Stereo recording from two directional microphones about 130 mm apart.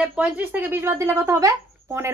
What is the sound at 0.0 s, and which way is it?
Speech, 10° right (ahead or behind).